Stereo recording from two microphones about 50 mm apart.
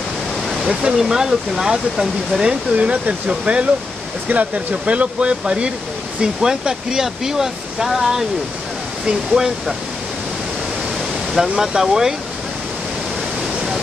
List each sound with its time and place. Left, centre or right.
0.7 s speech: centre
11.6 s speech: centre